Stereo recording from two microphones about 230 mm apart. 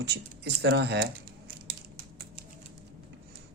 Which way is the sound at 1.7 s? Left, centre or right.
Right.